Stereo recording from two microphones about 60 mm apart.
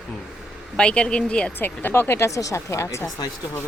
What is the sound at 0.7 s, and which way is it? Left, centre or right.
Speech, centre.